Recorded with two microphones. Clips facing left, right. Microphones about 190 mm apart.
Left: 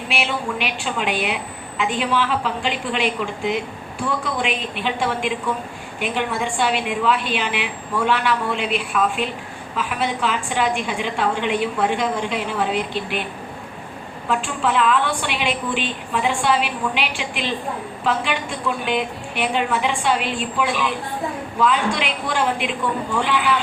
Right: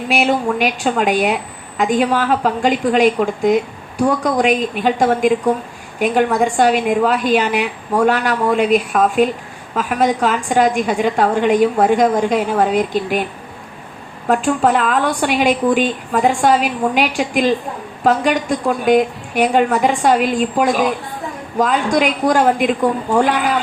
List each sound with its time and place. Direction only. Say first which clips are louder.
0.1 s a woman's voice: right 9 dB; 45° right (ahead or behind)
14.3 s a woman's voice: right 8 dB; 45° right (ahead or behind)